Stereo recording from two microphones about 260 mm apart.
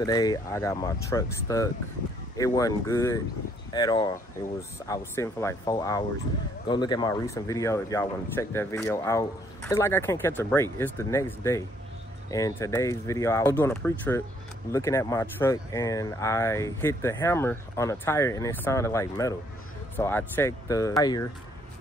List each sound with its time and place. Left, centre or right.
0.0 s speech: centre